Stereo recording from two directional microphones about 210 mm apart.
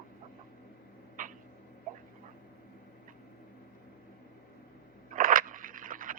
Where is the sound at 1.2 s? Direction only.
40° right (ahead or behind).